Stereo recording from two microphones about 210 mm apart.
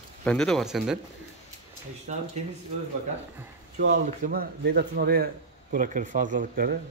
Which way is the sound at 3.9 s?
40° right (ahead or behind).